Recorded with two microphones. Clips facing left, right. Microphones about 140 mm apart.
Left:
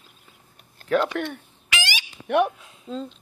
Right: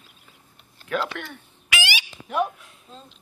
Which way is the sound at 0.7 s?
45° left (ahead or behind).